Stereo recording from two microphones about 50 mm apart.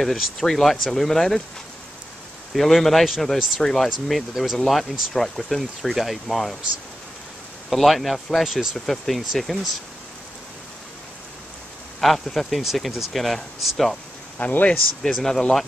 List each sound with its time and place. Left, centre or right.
0.0 s speech: centre
2.5 s speech: centre
7.7 s speech: centre
8.7 s speech: centre
12.0 s speech: centre
14.4 s speech: left
15.1 s speech: centre